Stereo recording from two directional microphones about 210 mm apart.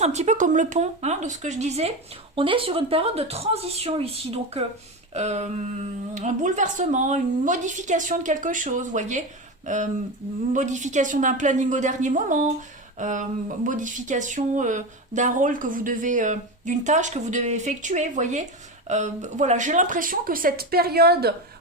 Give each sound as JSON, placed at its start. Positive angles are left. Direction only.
{"t": 0.0, "sound": "speech", "side_deg": -30}